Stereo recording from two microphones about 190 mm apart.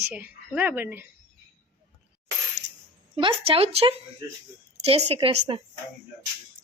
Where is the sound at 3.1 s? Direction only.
30° right (ahead or behind).